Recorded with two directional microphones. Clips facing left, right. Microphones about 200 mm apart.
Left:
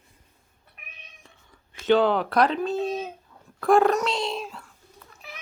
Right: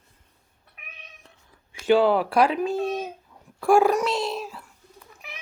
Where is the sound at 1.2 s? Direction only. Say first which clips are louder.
Even; centre (ahead or behind).